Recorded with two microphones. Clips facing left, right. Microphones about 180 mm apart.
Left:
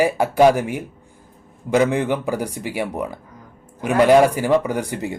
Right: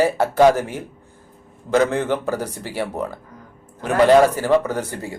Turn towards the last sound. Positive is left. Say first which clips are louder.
# left 2 dB
turn(degrees=15)  # may be behind; listen again after turning